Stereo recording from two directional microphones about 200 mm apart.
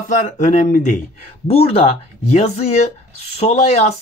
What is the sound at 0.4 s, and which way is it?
Speech, 40° left (ahead or behind).